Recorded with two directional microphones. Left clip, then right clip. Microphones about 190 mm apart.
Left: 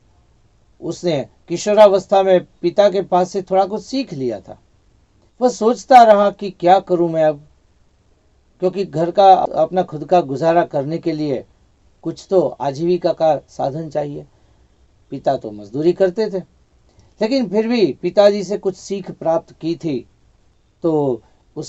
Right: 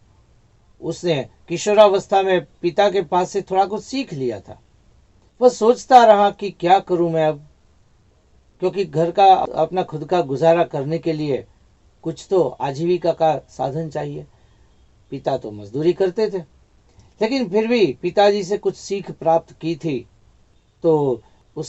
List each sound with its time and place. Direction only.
0.9 s speech: 40° left (ahead or behind)
8.5 s speech: 40° left (ahead or behind)
15.1 s speech: 40° left (ahead or behind)